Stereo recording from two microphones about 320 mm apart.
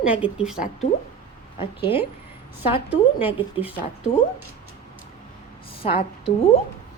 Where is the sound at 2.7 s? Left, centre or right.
Centre.